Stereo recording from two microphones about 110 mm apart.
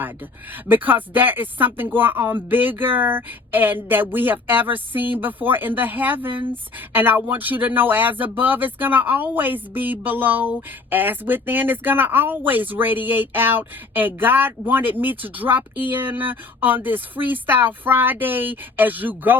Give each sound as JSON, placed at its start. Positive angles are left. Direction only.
{"t": 0.7, "sound": "speech", "side_deg": -15}